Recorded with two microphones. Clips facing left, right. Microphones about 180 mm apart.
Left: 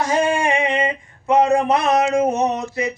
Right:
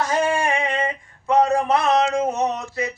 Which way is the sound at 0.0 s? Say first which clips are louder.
Left 2 dB; 15° left (ahead or behind).